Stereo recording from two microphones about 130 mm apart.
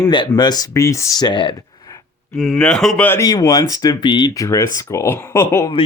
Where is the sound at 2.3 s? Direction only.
Centre (ahead or behind); by 3.2 s 15° left (ahead or behind).